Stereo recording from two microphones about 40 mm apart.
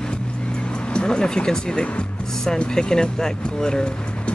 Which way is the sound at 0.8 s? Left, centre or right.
Left.